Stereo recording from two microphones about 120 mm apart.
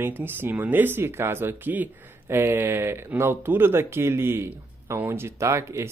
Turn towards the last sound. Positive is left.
turn(degrees=-20)  # may be behind; listen again after turning